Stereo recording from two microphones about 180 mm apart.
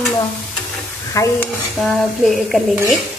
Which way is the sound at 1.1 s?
15° left (ahead or behind).